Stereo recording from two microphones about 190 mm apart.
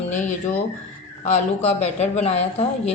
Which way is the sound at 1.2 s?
35° left (ahead or behind).